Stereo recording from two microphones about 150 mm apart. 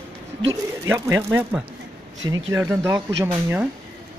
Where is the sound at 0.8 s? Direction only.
15° right (ahead or behind).